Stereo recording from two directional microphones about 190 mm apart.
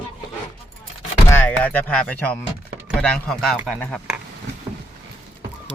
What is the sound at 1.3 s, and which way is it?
Speech, 10° left (ahead or behind).